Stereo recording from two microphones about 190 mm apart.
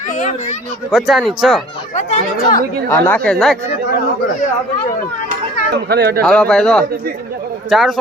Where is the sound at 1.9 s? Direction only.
40° left (ahead or behind).